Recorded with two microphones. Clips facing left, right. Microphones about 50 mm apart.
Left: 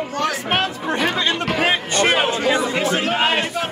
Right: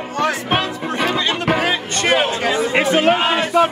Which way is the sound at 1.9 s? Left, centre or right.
Centre.